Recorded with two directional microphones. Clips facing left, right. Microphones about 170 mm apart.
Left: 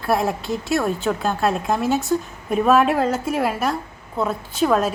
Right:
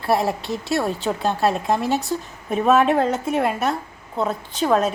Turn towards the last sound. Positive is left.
turn(degrees=0)  # may be behind; listen again after turning